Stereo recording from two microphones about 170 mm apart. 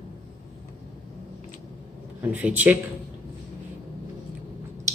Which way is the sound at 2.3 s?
10° right (ahead or behind).